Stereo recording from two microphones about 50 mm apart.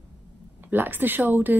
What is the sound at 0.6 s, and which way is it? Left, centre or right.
Speech, right.